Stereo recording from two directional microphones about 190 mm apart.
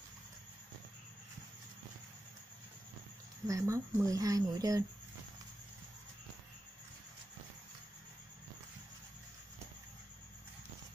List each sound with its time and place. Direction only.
3.4 s speech: 15° right (ahead or behind)